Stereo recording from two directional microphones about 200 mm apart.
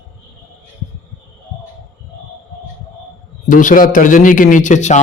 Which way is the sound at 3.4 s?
40° left (ahead or behind).